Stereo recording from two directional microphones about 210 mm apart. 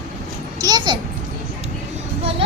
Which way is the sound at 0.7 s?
20° right (ahead or behind).